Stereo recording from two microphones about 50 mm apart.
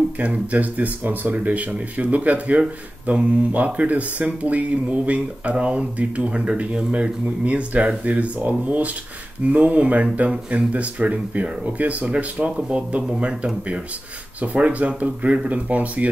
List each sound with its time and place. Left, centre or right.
0.2 s speech: right